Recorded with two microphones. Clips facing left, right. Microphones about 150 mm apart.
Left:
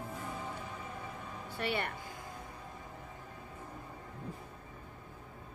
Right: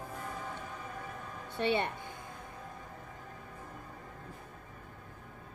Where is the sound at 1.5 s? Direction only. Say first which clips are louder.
Right 5 dB; 25° right (ahead or behind).